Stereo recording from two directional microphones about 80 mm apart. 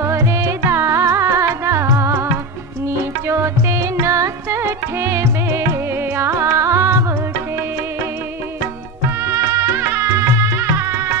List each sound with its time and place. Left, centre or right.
0.0 s music: right
9.2 s music: right